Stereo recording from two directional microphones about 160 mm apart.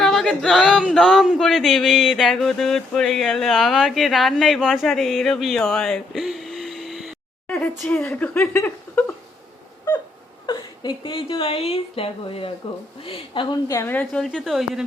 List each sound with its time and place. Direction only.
0.0 s a sound: centre (ahead or behind)
7.4 s a woman's voice: 10° left (ahead or behind)
10.4 s a woman's voice: 30° left (ahead or behind); by 14.8 s centre (ahead or behind)